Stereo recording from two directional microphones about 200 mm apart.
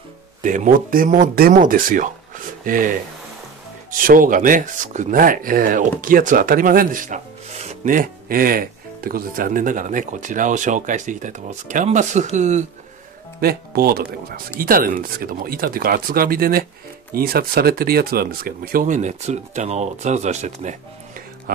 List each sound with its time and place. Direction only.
0.4 s speech: 40° right (ahead or behind)
13.4 s speech: 50° right (ahead or behind)